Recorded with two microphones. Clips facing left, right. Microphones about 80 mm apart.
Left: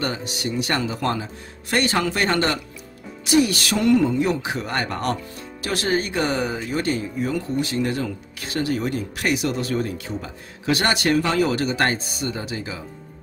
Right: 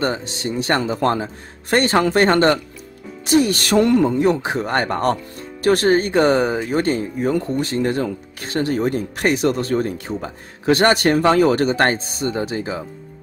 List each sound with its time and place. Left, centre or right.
0.0 s speech: right